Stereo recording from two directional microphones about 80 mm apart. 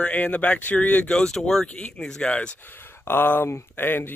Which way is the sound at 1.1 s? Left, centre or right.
Centre.